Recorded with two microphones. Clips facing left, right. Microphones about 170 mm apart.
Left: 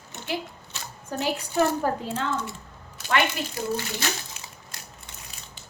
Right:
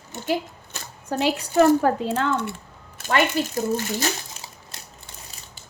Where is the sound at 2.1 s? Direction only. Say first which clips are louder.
Right 5 dB; 60° right (ahead or behind).